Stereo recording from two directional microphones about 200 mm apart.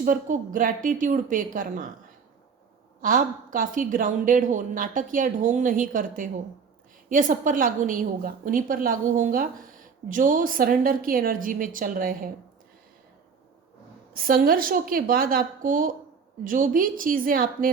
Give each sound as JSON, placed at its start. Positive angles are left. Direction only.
{"t": 0.0, "sound": "a woman's voice", "side_deg": -40}
{"t": 3.0, "sound": "a woman's voice", "side_deg": -45}
{"t": 14.1, "sound": "a woman's voice", "side_deg": -45}